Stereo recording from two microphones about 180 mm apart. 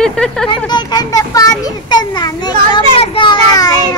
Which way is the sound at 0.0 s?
5° left (ahead or behind).